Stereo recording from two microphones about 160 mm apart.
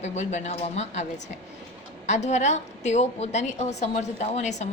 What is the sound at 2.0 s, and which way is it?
A woman's voice, 45° left (ahead or behind).